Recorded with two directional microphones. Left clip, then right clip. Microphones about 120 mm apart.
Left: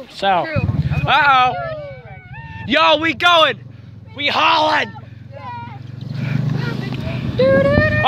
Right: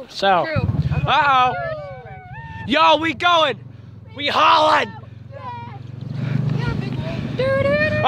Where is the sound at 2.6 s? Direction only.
35° right (ahead or behind).